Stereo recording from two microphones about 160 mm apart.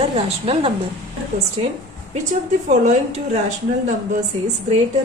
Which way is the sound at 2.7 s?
45° right (ahead or behind).